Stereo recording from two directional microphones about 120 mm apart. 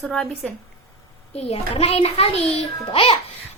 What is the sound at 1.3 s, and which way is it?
A child's voice, 55° left (ahead or behind).